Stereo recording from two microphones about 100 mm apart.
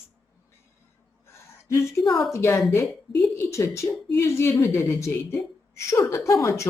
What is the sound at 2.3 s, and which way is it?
A woman's voice, 30° left (ahead or behind).